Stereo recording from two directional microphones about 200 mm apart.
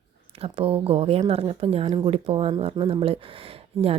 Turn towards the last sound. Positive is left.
turn(degrees=-30)  # may be behind; listen again after turning